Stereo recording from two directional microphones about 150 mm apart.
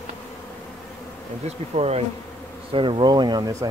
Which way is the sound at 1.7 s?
45° right (ahead or behind).